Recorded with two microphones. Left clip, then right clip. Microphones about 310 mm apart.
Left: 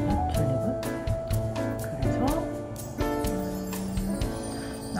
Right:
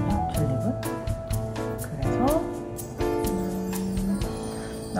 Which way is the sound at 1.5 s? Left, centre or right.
Centre.